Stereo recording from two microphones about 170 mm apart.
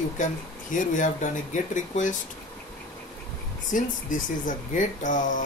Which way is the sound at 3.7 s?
50° left (ahead or behind).